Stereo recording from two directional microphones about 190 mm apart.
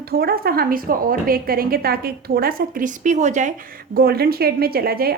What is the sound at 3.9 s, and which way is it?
A woman's voice, 55° right (ahead or behind).